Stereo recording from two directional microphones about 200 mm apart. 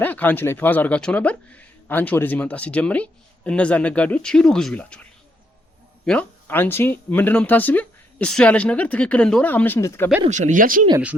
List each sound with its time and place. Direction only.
0.0 s speech: 10° left (ahead or behind)
6.1 s speech: 10° left (ahead or behind)
10.2 s speech: 35° right (ahead or behind)